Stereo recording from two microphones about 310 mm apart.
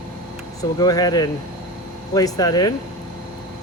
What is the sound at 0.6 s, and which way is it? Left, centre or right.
Speech, centre.